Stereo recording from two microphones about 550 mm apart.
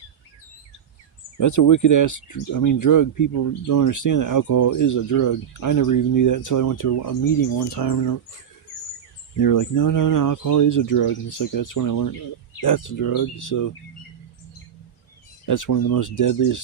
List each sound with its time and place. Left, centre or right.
1.4 s speech: left
9.4 s speech: left
15.4 s speech: left